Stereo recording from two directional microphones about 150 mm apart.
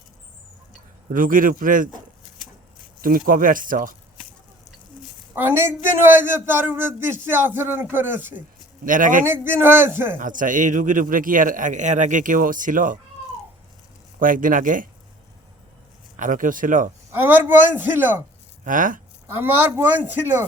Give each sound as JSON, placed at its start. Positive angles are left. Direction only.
{"t": 1.1, "sound": "a man's voice", "side_deg": -65}
{"t": 3.0, "sound": "a man's voice", "side_deg": -70}
{"t": 5.3, "sound": "a man's voice", "side_deg": -15}
{"t": 8.8, "sound": "a man's voice", "side_deg": -60}
{"t": 9.2, "sound": "a man's voice", "side_deg": -15}
{"t": 10.2, "sound": "a man's voice", "side_deg": -60}
{"t": 14.2, "sound": "a man's voice", "side_deg": -65}
{"t": 16.1, "sound": "a man's voice", "side_deg": -60}
{"t": 17.1, "sound": "a man's voice", "side_deg": -15}
{"t": 18.6, "sound": "a man's voice", "side_deg": -60}
{"t": 19.3, "sound": "a man's voice", "side_deg": -15}